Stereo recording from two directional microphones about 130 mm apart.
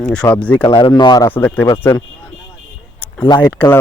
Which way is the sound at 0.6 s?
40° left (ahead or behind).